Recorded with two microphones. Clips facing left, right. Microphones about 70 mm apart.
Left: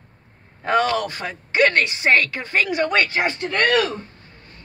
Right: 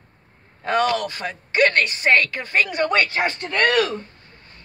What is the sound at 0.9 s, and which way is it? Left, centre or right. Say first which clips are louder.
Speech: left 1 dB; centre.